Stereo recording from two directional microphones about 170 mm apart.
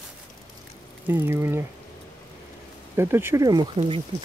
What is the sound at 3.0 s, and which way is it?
Speech, 15° right (ahead or behind).